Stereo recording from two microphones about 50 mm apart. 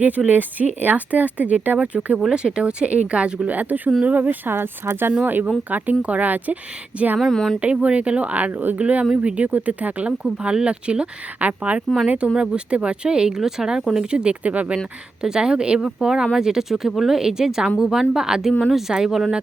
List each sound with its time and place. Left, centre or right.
0.3 s speech: right
3.5 s speech: right
7.2 s speech: centre
7.6 s speech: right
15.2 s speech: centre